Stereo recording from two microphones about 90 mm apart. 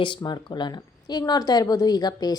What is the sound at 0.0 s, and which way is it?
A woman's voice, 60° left (ahead or behind).